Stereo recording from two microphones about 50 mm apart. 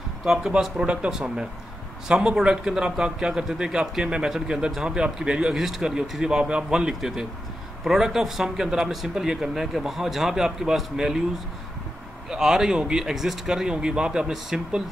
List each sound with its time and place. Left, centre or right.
0.2 s speech: centre
5.5 s speech: centre
12.3 s speech: centre